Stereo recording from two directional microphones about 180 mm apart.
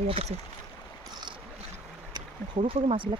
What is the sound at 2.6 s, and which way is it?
Speech, 35° right (ahead or behind).